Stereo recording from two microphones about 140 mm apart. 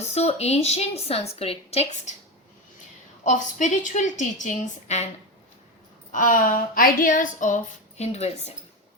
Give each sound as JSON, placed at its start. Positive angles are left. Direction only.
{"t": 0.1, "sound": "a woman's voice", "side_deg": 50}
{"t": 3.2, "sound": "a woman's voice", "side_deg": 65}
{"t": 6.1, "sound": "a woman's voice", "side_deg": 75}